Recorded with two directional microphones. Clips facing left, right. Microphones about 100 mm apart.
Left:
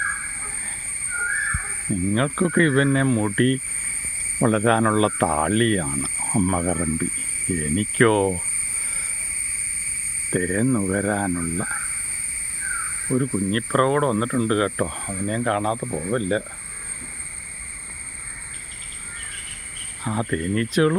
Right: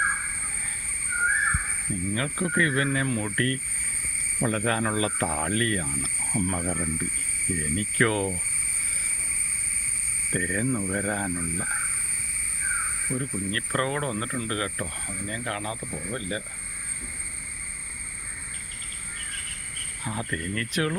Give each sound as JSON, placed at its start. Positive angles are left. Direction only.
{"t": 2.1, "sound": "speech", "side_deg": 35}
{"t": 4.4, "sound": "speech", "side_deg": 45}
{"t": 10.3, "sound": "speech", "side_deg": 30}
{"t": 13.1, "sound": "speech", "side_deg": 35}
{"t": 20.1, "sound": "speech", "side_deg": 30}